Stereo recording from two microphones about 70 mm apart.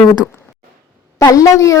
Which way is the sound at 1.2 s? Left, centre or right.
Left.